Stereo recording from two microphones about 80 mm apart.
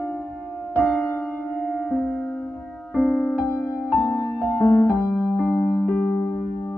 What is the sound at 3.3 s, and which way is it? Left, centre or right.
Music, left.